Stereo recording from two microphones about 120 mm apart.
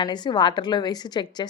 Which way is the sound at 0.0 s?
35° left (ahead or behind).